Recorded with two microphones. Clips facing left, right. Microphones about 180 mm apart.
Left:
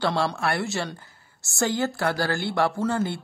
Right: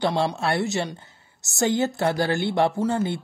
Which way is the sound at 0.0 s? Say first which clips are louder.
Right 2 dB; 15° right (ahead or behind).